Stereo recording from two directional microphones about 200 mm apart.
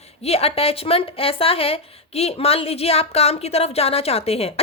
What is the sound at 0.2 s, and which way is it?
A woman's voice, 30° left (ahead or behind).